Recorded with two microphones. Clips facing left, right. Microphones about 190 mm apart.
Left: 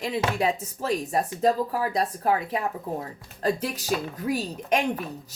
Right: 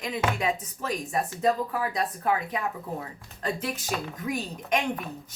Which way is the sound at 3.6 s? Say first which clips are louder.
Left 3 dB; 40° left (ahead or behind).